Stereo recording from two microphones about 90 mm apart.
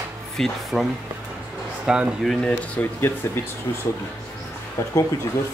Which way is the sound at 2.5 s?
25° left (ahead or behind).